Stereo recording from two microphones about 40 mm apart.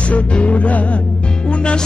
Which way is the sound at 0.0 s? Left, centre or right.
Left.